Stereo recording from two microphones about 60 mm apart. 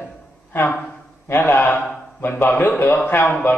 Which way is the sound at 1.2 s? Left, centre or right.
Left.